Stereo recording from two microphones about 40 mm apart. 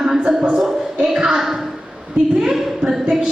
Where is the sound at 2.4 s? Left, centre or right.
Centre.